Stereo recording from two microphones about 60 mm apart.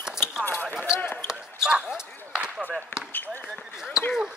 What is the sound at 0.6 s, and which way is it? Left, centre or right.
Basketball bounce, left.